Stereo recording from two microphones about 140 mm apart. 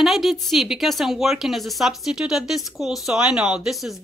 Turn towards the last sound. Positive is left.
turn(degrees=0)  # may be behind; listen again after turning